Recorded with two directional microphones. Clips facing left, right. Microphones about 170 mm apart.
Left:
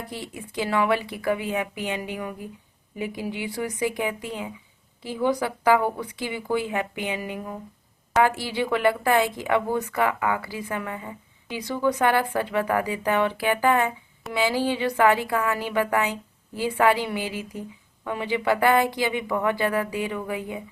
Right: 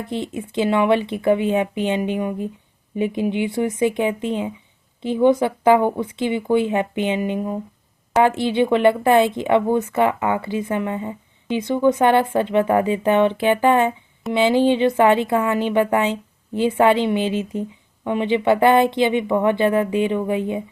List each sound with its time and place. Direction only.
0.1 s speech: 25° right (ahead or behind)